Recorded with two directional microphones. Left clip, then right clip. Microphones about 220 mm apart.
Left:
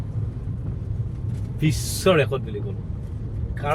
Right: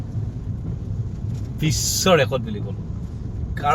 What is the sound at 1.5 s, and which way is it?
Speech, 15° right (ahead or behind).